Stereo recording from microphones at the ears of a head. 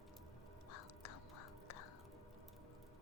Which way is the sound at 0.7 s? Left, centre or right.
Left.